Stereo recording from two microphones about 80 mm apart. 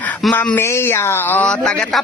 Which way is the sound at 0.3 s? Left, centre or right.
Centre.